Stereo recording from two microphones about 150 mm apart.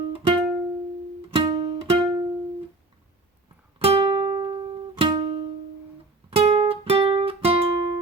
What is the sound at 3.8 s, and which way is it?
Music, 35° right (ahead or behind).